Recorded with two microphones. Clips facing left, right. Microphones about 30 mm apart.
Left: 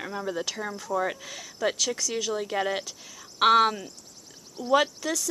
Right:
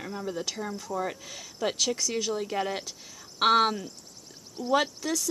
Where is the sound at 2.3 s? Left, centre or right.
Centre.